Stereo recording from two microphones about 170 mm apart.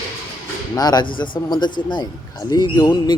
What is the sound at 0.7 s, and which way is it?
Speech, 25° left (ahead or behind).